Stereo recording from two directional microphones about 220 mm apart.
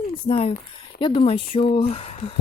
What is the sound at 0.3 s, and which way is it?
Speech, 25° left (ahead or behind).